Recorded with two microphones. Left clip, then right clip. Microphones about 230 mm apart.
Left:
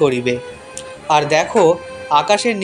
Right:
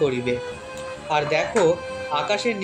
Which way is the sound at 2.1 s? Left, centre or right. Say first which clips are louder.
Left 9 dB; left.